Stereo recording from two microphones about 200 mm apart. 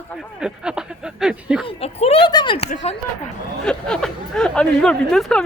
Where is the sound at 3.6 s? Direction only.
5° left (ahead or behind).